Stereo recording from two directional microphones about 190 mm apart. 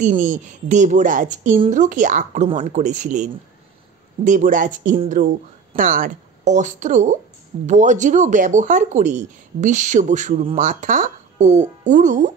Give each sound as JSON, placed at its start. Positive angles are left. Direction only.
{"t": 0.0, "sound": "speech", "side_deg": -40}